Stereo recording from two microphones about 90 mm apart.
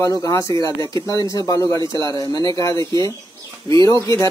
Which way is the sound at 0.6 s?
55° right (ahead or behind).